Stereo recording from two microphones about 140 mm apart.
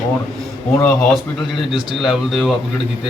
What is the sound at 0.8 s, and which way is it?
Speech, centre (ahead or behind).